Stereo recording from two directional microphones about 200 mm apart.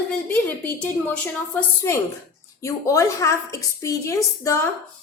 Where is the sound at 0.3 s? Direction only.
10° left (ahead or behind).